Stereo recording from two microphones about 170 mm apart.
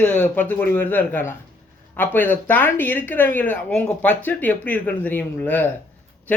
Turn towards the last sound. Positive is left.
turn(degrees=10)  # may be behind; listen again after turning